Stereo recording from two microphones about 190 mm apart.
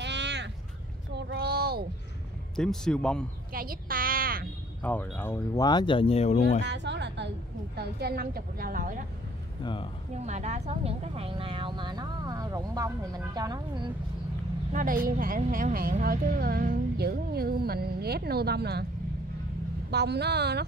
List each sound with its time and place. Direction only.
0.0 s a sound: 65° right (ahead or behind)
2.5 s a man's voice: 5° left (ahead or behind)
3.5 s a sound: 50° right (ahead or behind)
4.8 s speech: 10° left (ahead or behind); by 6.6 s 35° left (ahead or behind)
6.6 s a sound: 65° right (ahead or behind)
7.7 s a woman's voice: 55° right (ahead or behind)
9.6 s speech: 25° left (ahead or behind)
10.1 s speech: 35° right (ahead or behind)
14.7 s a woman's voice: 45° right (ahead or behind)
19.9 s speech: 60° right (ahead or behind)